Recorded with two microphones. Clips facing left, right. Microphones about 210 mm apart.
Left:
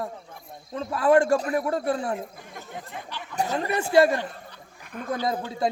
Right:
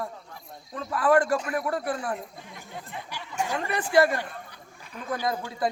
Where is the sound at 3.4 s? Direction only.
35° left (ahead or behind).